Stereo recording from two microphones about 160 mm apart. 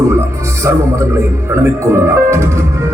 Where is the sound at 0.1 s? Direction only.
15° right (ahead or behind).